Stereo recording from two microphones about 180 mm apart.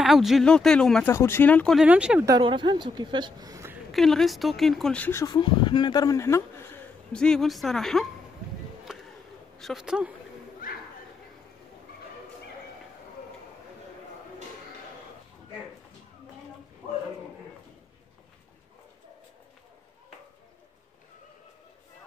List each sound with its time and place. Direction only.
0.0 s a woman's voice: centre (ahead or behind)
1.9 s speech: 5° right (ahead or behind)
2.2 s a woman's voice: 25° right (ahead or behind)
3.9 s a woman's voice: centre (ahead or behind)
5.2 s speech: 25° left (ahead or behind); by 8.1 s centre (ahead or behind)
9.6 s a woman's voice: centre (ahead or behind)